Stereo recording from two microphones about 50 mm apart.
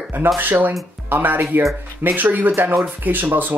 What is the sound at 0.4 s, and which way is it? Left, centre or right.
Music, right.